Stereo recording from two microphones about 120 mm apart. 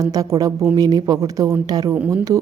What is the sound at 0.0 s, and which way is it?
A woman's voice, 30° right (ahead or behind).